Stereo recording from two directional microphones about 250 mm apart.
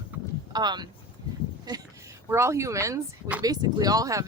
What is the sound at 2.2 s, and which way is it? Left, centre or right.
Speech, centre.